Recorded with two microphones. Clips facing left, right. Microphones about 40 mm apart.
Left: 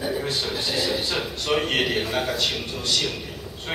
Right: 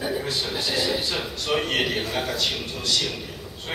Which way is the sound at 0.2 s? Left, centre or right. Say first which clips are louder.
Left 1 dB; centre.